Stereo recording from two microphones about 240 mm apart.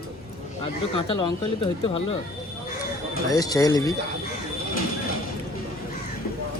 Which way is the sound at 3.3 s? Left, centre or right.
Centre.